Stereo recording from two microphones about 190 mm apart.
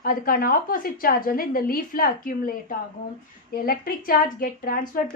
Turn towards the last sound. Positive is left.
turn(degrees=50)  # may be behind; listen again after turning